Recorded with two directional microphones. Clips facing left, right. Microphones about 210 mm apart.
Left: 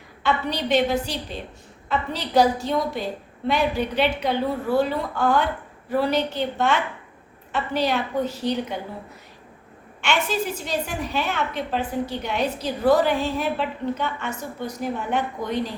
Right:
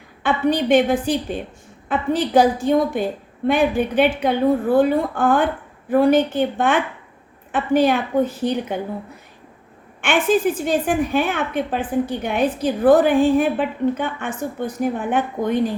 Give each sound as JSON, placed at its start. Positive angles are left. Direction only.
{"t": 0.2, "sound": "a woman's voice", "side_deg": -50}
{"t": 10.0, "sound": "a woman's voice", "side_deg": -50}